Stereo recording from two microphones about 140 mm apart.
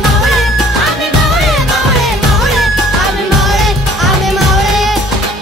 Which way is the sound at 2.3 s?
Centre (ahead or behind).